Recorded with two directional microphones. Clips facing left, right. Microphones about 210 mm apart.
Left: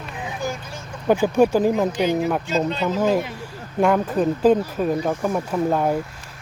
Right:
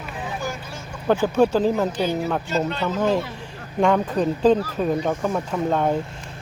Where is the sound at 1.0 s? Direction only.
10° left (ahead or behind).